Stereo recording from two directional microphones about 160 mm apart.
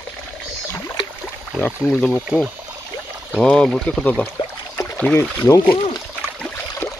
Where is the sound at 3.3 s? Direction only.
5° left (ahead or behind).